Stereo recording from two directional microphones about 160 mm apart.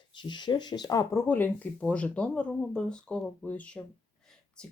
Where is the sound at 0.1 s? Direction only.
30° left (ahead or behind).